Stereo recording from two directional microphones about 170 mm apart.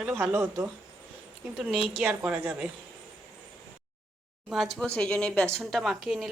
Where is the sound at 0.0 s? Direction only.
5° right (ahead or behind).